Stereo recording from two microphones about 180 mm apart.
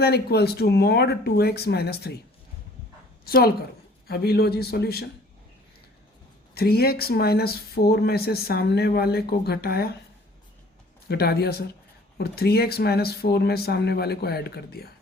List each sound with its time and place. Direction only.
0.0 s speech: 65° left (ahead or behind)
3.2 s speech: 60° left (ahead or behind)
6.5 s speech: 60° left (ahead or behind)
11.1 s speech: 60° left (ahead or behind)